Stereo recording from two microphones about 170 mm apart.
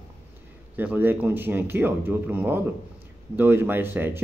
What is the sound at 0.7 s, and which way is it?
Speech, 10° right (ahead or behind).